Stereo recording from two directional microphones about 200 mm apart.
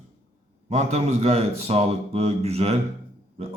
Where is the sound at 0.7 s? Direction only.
35° right (ahead or behind).